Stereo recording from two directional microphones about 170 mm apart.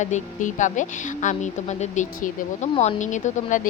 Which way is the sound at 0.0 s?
45° left (ahead or behind).